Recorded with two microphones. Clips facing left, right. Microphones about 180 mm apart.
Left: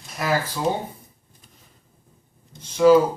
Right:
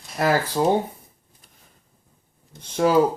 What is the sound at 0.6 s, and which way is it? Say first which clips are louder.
Speech: right 5 dB; 45° right (ahead or behind).